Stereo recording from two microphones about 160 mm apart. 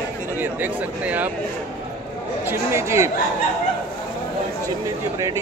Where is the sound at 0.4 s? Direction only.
10° right (ahead or behind).